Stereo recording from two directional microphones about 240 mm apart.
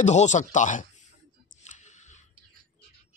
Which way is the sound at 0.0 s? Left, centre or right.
Left.